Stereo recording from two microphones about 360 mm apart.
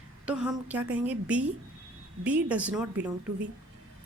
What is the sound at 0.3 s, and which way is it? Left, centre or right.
A woman's voice, centre.